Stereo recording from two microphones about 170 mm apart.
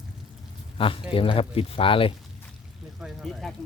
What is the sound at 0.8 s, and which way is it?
Speech, 30° left (ahead or behind).